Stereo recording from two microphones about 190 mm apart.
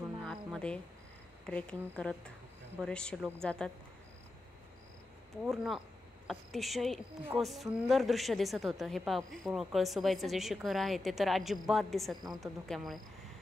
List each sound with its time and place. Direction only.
0.2 s a sound: centre (ahead or behind)
1.5 s a woman's voice: 5° left (ahead or behind)
5.4 s a woman's voice: centre (ahead or behind)